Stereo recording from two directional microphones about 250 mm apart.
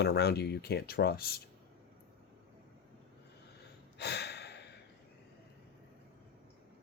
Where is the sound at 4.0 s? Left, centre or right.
Left.